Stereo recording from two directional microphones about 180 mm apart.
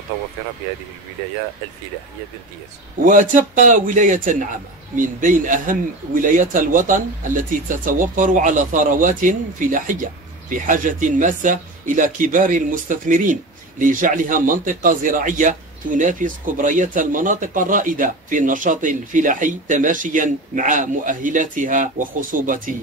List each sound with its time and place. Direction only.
3.0 s speech: 45° right (ahead or behind)